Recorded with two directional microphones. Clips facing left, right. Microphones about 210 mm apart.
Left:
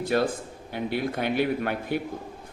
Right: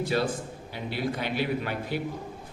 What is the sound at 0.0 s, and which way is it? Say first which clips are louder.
A man's voice: left 2 dB; 50° left (ahead or behind).